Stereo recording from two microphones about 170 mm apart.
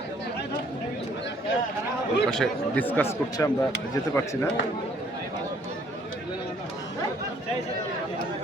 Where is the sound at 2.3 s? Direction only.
5° left (ahead or behind).